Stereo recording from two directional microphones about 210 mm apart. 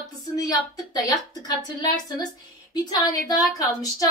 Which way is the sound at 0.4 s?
20° left (ahead or behind).